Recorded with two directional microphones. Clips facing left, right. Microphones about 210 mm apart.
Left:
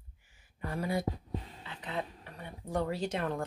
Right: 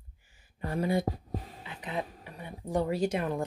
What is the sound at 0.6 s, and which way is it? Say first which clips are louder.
Speech: right 4 dB; 30° right (ahead or behind).